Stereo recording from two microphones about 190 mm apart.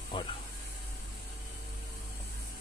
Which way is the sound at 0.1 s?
25° left (ahead or behind).